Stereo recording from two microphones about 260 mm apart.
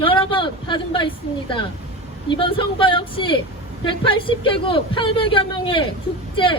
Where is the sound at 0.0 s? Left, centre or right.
Centre.